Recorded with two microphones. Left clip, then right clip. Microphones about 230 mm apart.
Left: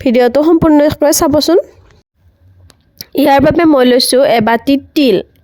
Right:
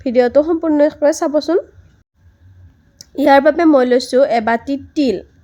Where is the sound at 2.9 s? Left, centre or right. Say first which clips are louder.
Left 2 dB; left.